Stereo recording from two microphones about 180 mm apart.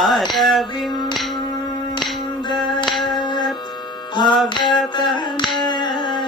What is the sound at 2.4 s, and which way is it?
Music, 25° left (ahead or behind).